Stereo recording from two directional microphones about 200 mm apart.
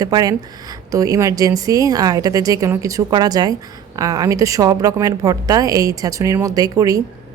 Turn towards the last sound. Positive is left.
turn(degrees=-15)  # may be behind; listen again after turning